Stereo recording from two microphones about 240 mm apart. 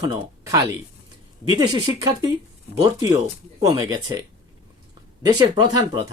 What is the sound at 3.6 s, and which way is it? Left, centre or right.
Speech, centre.